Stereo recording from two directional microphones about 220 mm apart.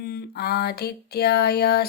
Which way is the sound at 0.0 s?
45° left (ahead or behind).